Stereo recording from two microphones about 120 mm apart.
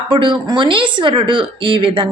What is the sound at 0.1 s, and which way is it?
A woman's voice, 45° right (ahead or behind).